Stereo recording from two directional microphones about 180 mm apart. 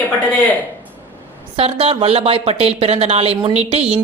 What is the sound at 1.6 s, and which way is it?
Speech, 35° right (ahead or behind).